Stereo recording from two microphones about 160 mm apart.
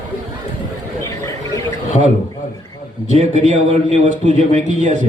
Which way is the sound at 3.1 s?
40° right (ahead or behind).